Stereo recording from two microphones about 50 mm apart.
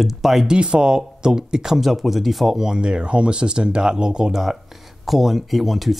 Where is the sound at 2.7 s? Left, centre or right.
Centre.